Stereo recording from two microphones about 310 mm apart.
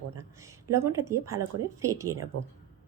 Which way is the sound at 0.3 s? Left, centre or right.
Centre.